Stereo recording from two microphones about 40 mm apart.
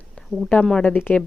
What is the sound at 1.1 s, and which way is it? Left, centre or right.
Speech, left.